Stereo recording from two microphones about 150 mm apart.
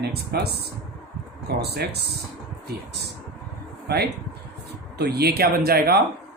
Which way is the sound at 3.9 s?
90° right.